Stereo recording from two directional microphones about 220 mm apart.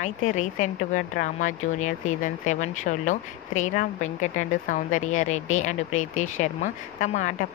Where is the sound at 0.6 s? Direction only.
35° left (ahead or behind).